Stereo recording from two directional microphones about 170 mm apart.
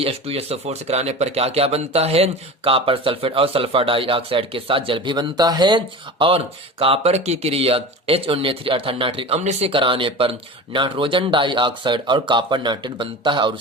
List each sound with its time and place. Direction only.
0.0 s speech: 35° right (ahead or behind)